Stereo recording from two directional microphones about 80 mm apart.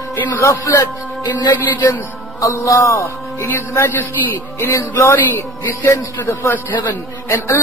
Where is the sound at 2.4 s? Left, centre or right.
Left.